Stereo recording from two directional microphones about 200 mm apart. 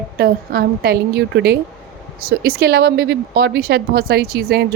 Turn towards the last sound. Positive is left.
turn(degrees=-55)  # may be behind; listen again after turning